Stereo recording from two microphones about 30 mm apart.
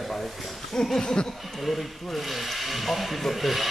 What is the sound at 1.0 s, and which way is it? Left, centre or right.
Speech, left.